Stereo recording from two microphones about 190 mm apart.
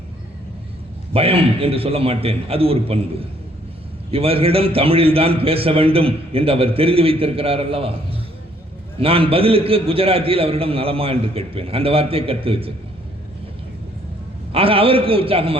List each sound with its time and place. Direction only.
1.1 s a man's voice: 30° right (ahead or behind)
14.5 s a man's voice: 30° right (ahead or behind)